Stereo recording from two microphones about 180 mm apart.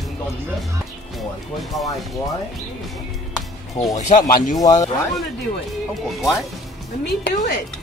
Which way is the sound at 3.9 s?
45° left (ahead or behind).